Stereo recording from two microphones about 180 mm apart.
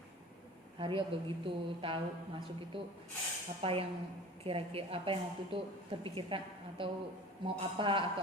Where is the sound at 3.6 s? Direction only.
30° right (ahead or behind).